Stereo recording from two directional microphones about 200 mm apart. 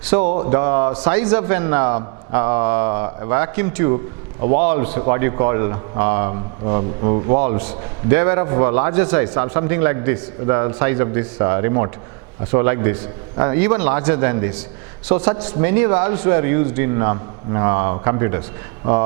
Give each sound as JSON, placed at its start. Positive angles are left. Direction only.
{"t": 0.3, "sound": "speech", "side_deg": -35}
{"t": 0.5, "sound": "a man's voice", "side_deg": -15}
{"t": 7.3, "sound": "a man's voice", "side_deg": -10}